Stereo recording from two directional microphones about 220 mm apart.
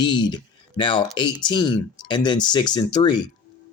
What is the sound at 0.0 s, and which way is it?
Speech, 20° left (ahead or behind).